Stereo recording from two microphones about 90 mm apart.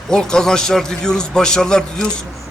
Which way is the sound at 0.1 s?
5° left (ahead or behind).